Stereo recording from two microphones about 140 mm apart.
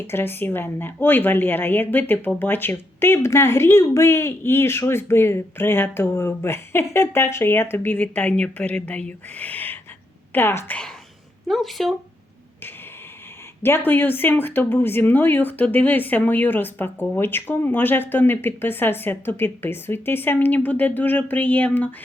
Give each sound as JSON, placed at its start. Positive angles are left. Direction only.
{"t": 0.1, "sound": "speech", "side_deg": 15}
{"t": 11.4, "sound": "speech", "side_deg": 0}
{"t": 13.6, "sound": "speech", "side_deg": 15}